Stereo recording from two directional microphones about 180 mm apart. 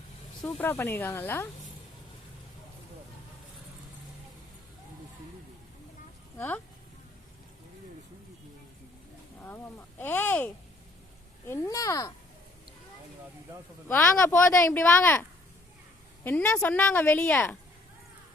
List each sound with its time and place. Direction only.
0.4 s a woman's voice: 10° left (ahead or behind)
6.3 s speech: 15° left (ahead or behind)
9.4 s a woman's voice: 10° left (ahead or behind)
13.8 s a woman's voice: 10° left (ahead or behind)
16.2 s a woman's voice: 10° left (ahead or behind)